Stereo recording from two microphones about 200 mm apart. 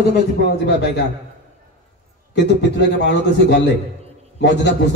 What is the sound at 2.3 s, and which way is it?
A man's voice, 60° left (ahead or behind).